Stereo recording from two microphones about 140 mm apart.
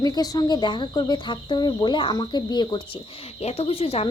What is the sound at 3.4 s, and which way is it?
Speech, 45° left (ahead or behind).